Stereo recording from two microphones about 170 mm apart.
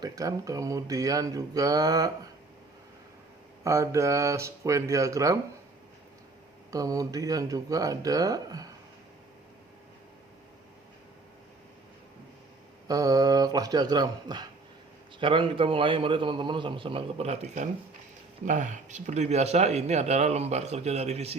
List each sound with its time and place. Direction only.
0.0 s speech: 20° right (ahead or behind)
3.6 s speech: 20° right (ahead or behind)
6.7 s speech: 20° right (ahead or behind)
12.9 s speech: 20° right (ahead or behind); by 21.3 s 40° right (ahead or behind)